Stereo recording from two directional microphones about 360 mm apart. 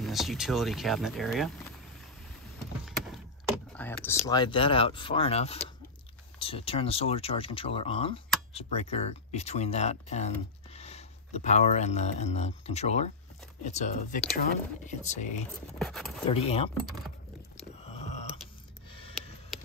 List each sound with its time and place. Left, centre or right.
0.0 s speech: centre
3.7 s speech: centre
15.8 s speech: centre
16.3 s speech: centre
17.8 s a sound: centre